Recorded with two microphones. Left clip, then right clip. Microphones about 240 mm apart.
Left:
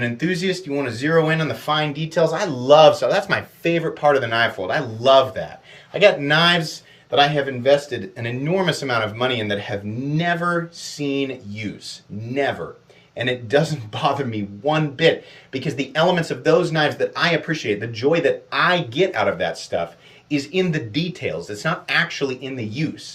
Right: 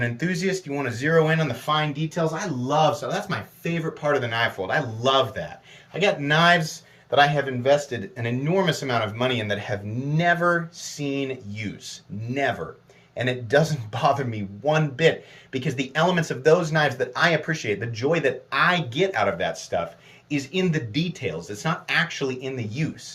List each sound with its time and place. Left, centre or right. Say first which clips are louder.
0.0 s speech: left 4 dB; right
7.6 s speech: left 4 dB; centre
13.1 s speech: left 2 dB; right